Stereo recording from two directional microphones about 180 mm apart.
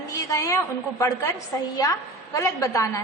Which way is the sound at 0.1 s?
15° left (ahead or behind).